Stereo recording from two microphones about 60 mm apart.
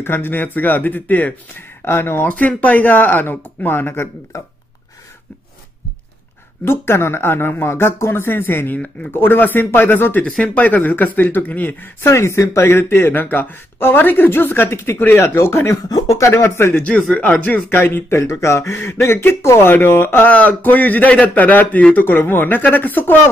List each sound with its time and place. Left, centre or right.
0.0 s speech: left
1.9 s speech: left
2.2 s speech: left
6.6 s speech: left
10.2 s speech: centre
12.0 s speech: left
15.1 s speech: left
18.2 s speech: left
20.2 s speech: left